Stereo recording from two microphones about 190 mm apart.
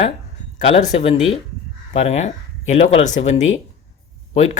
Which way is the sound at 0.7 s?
35° left (ahead or behind).